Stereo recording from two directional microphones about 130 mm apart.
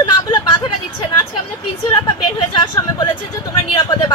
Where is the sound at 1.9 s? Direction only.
35° left (ahead or behind).